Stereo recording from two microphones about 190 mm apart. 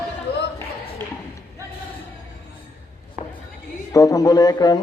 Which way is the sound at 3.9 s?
20° left (ahead or behind).